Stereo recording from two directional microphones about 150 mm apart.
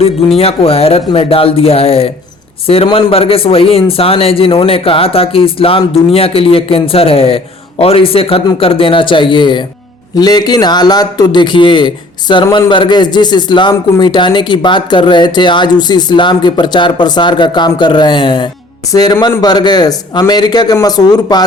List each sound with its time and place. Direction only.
0.3 s a man's voice: 40° left (ahead or behind)